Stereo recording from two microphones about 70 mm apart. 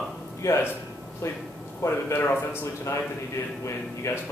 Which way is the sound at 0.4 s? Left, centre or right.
Left.